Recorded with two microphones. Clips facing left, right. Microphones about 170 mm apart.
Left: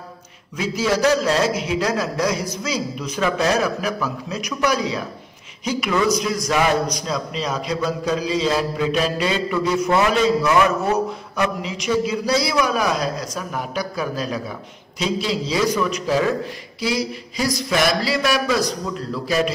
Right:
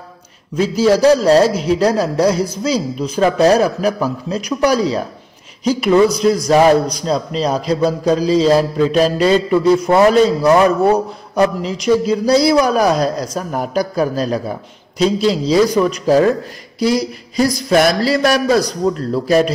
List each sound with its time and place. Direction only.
0.6 s a man's voice: 35° right (ahead or behind)